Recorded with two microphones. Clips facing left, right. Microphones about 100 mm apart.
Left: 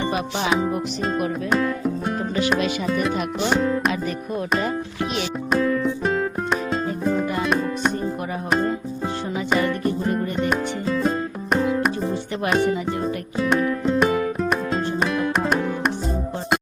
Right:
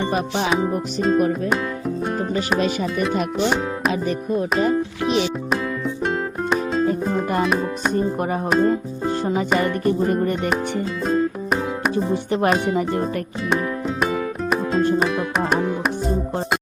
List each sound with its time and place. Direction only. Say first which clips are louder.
0.1 s music: right 2 dB; 40° right (ahead or behind)
0.5 s music: right 1 dB; centre (ahead or behind)
3.5 s music: left 1 dB; centre (ahead or behind)
5.5 s music: left 3 dB; centre (ahead or behind)
9.6 s music: right 3 dB; 45° right (ahead or behind)
10.5 s music: even; centre (ahead or behind)
14.9 s music: right 2 dB; centre (ahead or behind)